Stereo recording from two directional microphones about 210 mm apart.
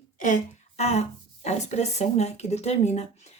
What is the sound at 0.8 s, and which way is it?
Speech, 30° left (ahead or behind).